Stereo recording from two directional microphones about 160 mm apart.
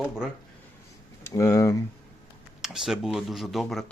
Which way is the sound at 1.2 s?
20° left (ahead or behind).